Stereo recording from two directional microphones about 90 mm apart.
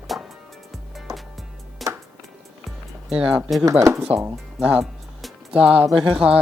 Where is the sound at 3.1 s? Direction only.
10° right (ahead or behind).